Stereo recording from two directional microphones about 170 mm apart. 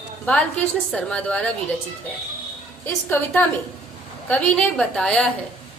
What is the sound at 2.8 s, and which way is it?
A woman's voice, 10° left (ahead or behind).